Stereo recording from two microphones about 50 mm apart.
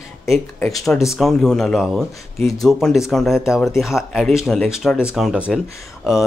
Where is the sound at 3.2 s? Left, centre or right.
Centre.